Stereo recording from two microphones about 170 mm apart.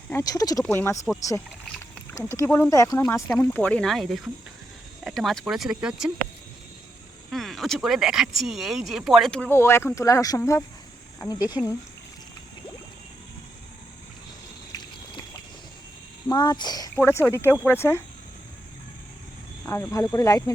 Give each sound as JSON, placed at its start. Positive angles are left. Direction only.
{"t": 0.1, "sound": "speech", "side_deg": 20}
{"t": 2.1, "sound": "speech", "side_deg": 15}
{"t": 3.2, "sound": "speech", "side_deg": 5}
{"t": 7.3, "sound": "speech", "side_deg": 0}
{"t": 14.7, "sound": "vehicle", "side_deg": 25}
{"t": 16.3, "sound": "speech", "side_deg": 25}
{"t": 19.6, "sound": "speech", "side_deg": 15}